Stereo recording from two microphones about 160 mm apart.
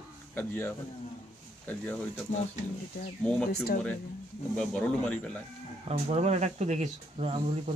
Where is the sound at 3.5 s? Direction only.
80° left.